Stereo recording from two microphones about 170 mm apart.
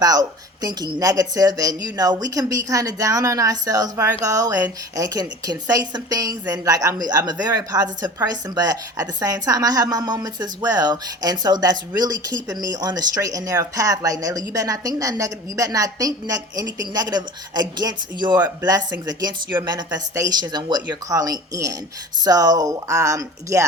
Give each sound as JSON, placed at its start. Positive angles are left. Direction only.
{"t": 0.0, "sound": "a woman's voice", "side_deg": -20}